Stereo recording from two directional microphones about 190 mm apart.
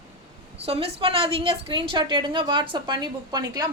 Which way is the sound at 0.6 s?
30° right (ahead or behind).